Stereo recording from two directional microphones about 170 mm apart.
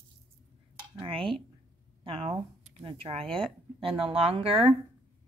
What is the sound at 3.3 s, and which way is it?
Speech, 5° left (ahead or behind).